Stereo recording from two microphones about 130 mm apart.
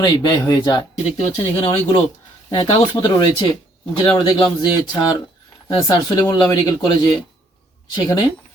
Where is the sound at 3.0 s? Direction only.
30° left (ahead or behind).